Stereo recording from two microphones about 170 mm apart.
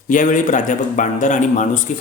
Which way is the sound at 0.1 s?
50° left (ahead or behind).